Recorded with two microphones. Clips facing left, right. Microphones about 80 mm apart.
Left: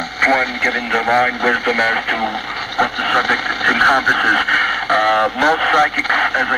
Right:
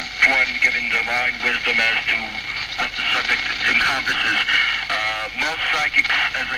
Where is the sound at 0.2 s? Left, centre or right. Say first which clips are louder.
Left 4 dB; left.